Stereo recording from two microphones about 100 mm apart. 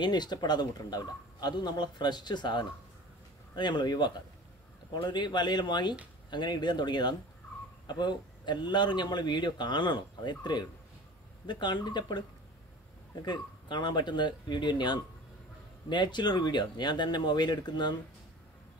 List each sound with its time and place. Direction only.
0.0 s a man's voice: 45° left (ahead or behind)
11.6 s a man's voice: 50° left (ahead or behind)